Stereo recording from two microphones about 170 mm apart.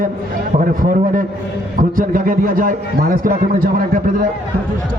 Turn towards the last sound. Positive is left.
turn(degrees=-55)  # may be behind; listen again after turning